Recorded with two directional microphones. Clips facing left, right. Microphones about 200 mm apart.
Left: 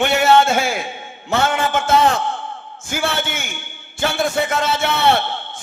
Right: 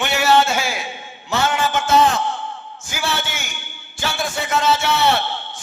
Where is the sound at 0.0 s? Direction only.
55° left (ahead or behind).